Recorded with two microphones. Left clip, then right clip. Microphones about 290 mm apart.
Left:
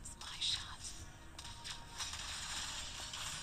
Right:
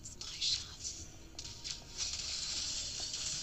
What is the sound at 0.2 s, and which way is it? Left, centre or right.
Music, centre.